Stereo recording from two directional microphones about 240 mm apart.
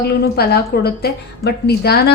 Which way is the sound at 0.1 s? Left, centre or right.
Left.